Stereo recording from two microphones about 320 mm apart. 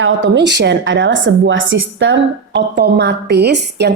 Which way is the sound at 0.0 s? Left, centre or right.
Right.